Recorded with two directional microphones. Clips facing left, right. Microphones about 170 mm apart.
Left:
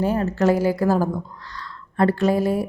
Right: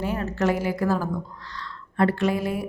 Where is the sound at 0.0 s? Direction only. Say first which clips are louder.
Left 5 dB; 35° left (ahead or behind).